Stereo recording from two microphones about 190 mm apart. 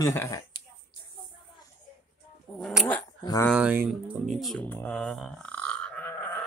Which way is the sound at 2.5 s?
5° left (ahead or behind).